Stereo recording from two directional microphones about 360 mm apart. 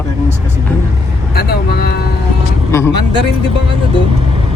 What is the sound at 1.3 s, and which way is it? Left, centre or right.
Speech, left.